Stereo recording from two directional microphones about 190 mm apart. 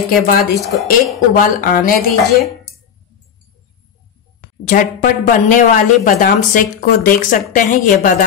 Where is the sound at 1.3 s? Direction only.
45° left (ahead or behind).